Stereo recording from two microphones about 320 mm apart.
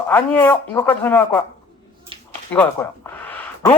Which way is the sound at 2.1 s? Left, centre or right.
Centre.